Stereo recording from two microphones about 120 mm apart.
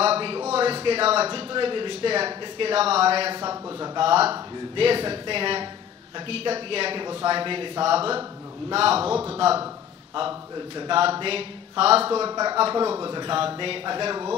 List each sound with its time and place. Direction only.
0.0 s a sound: 55° right (ahead or behind)
0.5 s a man's voice: 55° right (ahead or behind)
3.3 s speech: 35° right (ahead or behind)
4.0 s a man's voice: 55° right (ahead or behind)
10.9 s a man's voice: 50° right (ahead or behind)
12.3 s a man's voice: 35° right (ahead or behind)